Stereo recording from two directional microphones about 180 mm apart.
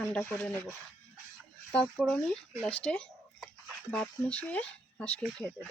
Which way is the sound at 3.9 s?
5° left (ahead or behind).